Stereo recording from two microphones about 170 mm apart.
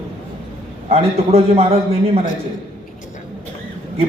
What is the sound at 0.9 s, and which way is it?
Speech, 40° right (ahead or behind).